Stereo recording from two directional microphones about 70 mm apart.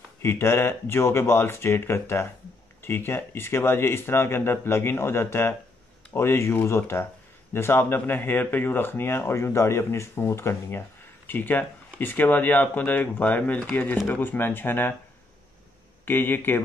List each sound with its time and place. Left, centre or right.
0.2 s speech: left
11.2 s speech: left
16.1 s speech: left